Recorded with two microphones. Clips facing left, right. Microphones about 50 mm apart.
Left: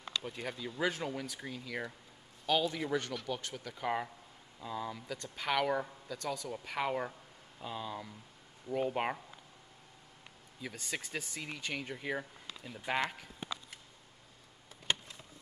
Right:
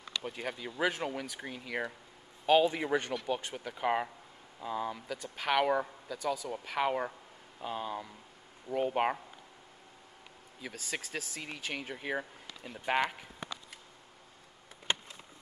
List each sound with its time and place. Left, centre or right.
0.3 s speech: centre
1.4 s speech: right
4.9 s speech: centre
5.3 s speech: right
7.6 s speech: right
8.9 s speech: centre
10.6 s speech: centre